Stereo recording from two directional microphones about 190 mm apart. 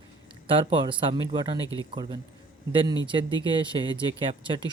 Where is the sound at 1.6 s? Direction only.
20° left (ahead or behind).